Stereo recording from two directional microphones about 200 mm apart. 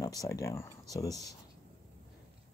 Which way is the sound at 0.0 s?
15° left (ahead or behind).